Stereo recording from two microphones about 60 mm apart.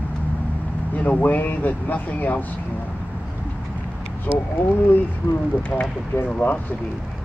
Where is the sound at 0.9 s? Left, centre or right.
Left.